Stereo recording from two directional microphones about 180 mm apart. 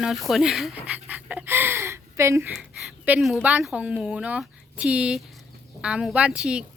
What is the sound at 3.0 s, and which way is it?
A woman's voice, 5° right (ahead or behind).